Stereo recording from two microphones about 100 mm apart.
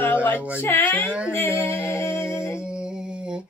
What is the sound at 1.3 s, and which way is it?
Music, 20° left (ahead or behind).